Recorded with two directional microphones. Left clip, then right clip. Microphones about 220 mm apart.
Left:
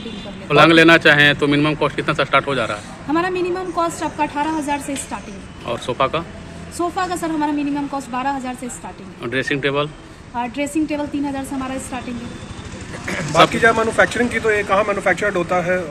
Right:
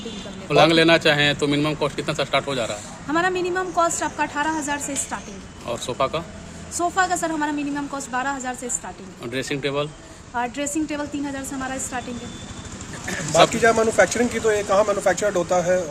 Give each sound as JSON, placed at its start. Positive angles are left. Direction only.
{"t": 0.4, "sound": "a man's voice", "side_deg": -5}
{"t": 13.6, "sound": "speech", "side_deg": -35}